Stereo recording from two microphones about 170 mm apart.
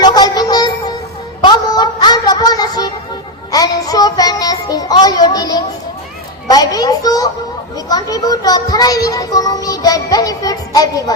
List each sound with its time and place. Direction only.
0.0 s music: 25° left (ahead or behind)
1.4 s a sound: 25° left (ahead or behind)
3.5 s child singing: 20° left (ahead or behind)
6.5 s speech: 20° left (ahead or behind)